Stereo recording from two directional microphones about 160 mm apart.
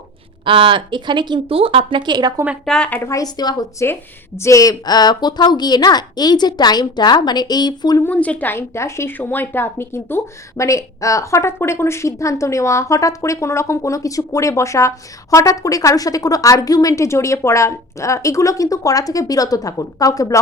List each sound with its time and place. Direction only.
0.4 s speech: 30° right (ahead or behind)
2.6 s a woman's voice: 5° left (ahead or behind); by 8.0 s 25° left (ahead or behind)
8.0 s a woman's voice: 10° left (ahead or behind)